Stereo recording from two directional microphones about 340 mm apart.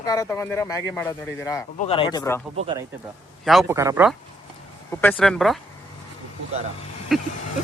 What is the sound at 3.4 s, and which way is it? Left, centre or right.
Speech, centre.